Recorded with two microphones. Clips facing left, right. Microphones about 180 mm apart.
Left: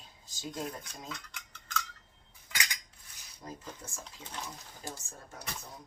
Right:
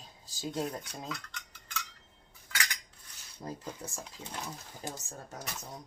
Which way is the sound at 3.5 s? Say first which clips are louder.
Right 4 dB; 40° right (ahead or behind).